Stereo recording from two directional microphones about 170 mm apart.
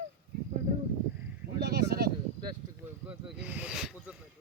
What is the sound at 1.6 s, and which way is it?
Speech, 70° right (ahead or behind).